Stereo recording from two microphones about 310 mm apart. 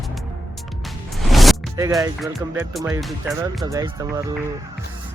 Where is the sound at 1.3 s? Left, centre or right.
Centre.